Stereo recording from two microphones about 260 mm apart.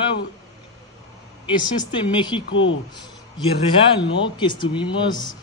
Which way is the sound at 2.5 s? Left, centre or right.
Left.